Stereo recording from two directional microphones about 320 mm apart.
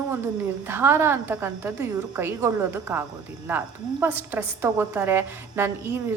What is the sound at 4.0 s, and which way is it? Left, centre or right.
A woman's voice, centre.